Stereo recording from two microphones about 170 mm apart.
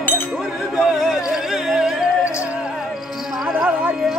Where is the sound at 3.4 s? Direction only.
5° right (ahead or behind).